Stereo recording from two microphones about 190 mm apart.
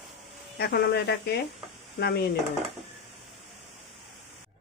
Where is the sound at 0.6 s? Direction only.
60° left (ahead or behind).